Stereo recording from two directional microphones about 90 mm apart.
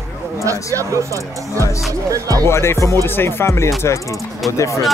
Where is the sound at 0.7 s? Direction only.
35° right (ahead or behind).